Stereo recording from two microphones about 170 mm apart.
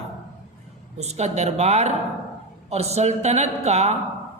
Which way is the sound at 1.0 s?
40° right (ahead or behind).